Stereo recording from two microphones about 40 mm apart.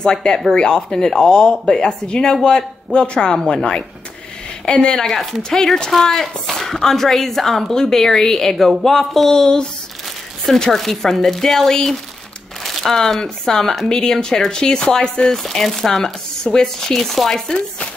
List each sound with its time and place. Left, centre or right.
0.0 s a woman's voice: centre
5.0 s a woman's voice: centre
10.7 s a woman's voice: centre
17.0 s chopping: centre
17.5 s chopping: left